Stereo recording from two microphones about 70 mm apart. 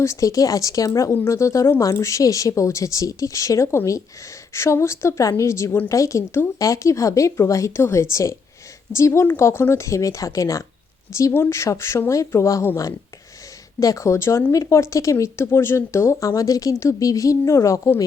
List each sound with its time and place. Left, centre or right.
0.0 s speech: left
1.1 s speech: left
13.7 s speech: left